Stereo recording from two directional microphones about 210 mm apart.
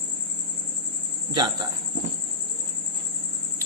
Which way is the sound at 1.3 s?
20° right (ahead or behind).